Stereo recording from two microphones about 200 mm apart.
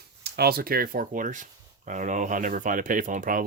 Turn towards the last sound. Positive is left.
turn(degrees=-40)  # may be behind; listen again after turning